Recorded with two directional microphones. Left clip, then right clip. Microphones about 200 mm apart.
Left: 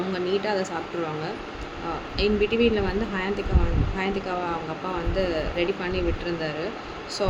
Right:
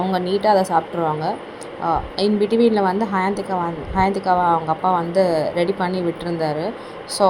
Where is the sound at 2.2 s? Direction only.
30° right (ahead or behind).